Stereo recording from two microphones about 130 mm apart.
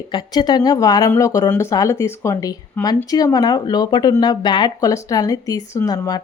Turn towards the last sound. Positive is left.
turn(degrees=30)  # may be behind; listen again after turning